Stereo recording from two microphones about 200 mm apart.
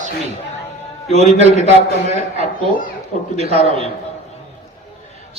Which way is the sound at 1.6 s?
35° right (ahead or behind).